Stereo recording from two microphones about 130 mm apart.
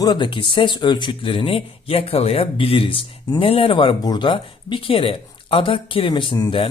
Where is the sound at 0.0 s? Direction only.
35° left (ahead or behind).